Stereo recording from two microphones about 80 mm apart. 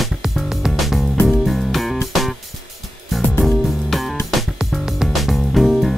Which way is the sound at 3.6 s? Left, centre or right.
Centre.